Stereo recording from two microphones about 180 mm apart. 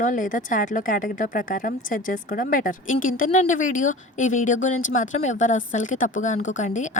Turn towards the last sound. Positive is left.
turn(degrees=40)  # may be behind; listen again after turning